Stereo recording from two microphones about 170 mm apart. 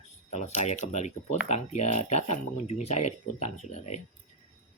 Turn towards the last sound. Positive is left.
turn(degrees=40)  # may be behind; listen again after turning